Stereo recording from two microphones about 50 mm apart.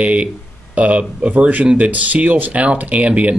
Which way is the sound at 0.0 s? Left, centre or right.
Right.